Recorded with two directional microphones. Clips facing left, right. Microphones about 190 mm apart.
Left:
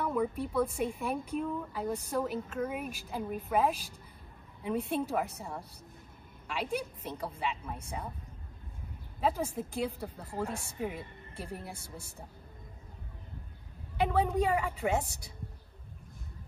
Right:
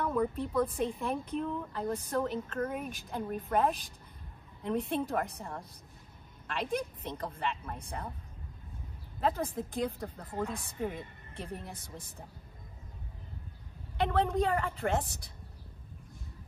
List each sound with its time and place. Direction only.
0.0 s a woman's voice: 10° left (ahead or behind)
9.2 s a woman's voice: 5° left (ahead or behind)
13.9 s speech: 10° left (ahead or behind)